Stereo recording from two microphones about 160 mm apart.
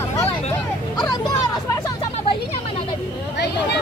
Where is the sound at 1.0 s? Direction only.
25° left (ahead or behind).